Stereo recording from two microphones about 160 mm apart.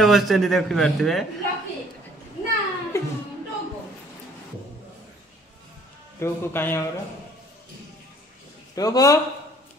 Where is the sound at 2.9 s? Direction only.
15° left (ahead or behind).